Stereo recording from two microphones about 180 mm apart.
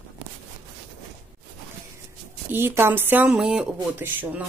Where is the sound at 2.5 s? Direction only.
10° right (ahead or behind).